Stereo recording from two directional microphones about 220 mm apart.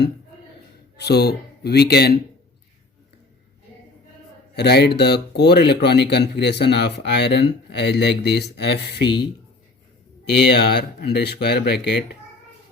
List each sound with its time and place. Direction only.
0.9 s speech: 45° left (ahead or behind)
4.5 s speech: 50° left (ahead or behind)
10.2 s speech: 50° left (ahead or behind)